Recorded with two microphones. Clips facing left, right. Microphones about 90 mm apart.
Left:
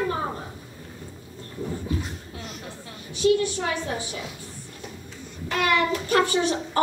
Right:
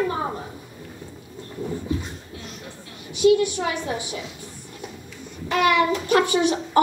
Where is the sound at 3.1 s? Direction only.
15° right (ahead or behind).